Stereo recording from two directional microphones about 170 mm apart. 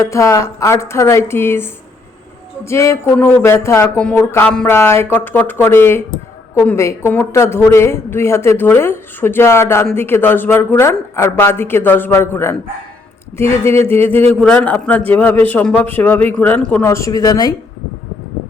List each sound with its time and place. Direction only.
0.0 s speech: 15° left (ahead or behind)
16.8 s speech: 15° left (ahead or behind)